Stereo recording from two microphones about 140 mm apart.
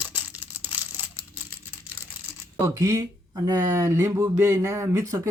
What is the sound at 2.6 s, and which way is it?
Speech, 20° right (ahead or behind).